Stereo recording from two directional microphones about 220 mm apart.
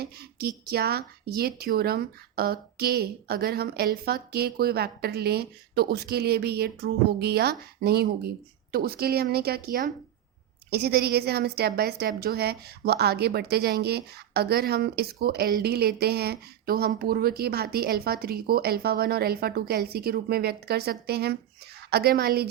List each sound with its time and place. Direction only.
0.0 s a woman's voice: 45° right (ahead or behind)